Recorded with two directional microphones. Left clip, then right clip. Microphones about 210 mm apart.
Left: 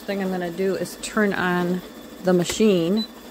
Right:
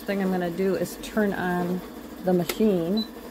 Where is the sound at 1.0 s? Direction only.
20° left (ahead or behind).